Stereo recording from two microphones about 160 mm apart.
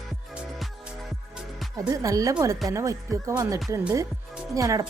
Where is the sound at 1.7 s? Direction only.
20° right (ahead or behind).